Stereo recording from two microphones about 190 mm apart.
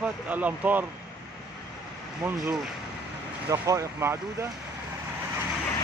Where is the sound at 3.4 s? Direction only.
15° right (ahead or behind).